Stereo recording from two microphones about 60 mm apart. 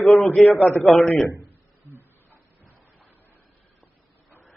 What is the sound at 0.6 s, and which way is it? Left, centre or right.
Speech, left.